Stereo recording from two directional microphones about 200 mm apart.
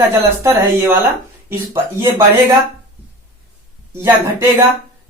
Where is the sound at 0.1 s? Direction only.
15° right (ahead or behind).